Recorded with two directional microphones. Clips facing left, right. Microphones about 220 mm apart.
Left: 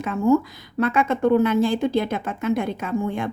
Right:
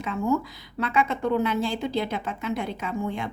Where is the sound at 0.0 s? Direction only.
50° left (ahead or behind).